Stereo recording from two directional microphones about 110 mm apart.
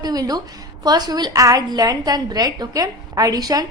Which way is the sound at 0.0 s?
35° right (ahead or behind).